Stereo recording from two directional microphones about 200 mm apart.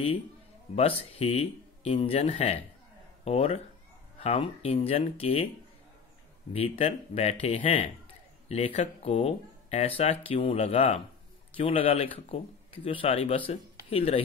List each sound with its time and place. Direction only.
0.7 s speech: 30° left (ahead or behind)
6.5 s speech: 30° left (ahead or behind)